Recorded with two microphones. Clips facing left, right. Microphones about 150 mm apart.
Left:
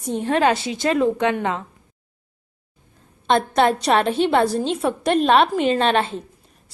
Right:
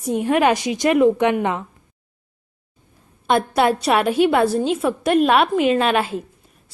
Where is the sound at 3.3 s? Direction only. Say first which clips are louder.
Even; 5° right (ahead or behind).